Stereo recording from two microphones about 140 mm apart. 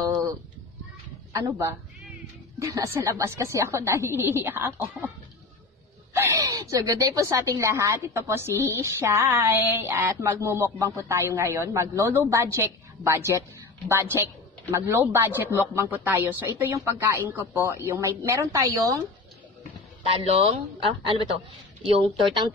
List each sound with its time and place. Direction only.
1.3 s speech: 20° right (ahead or behind)
6.1 s speech: 20° right (ahead or behind)
20.1 s speech: 45° right (ahead or behind)